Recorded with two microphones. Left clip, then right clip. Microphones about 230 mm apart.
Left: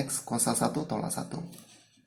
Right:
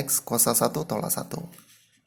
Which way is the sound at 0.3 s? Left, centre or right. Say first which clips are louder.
Right 6 dB; right.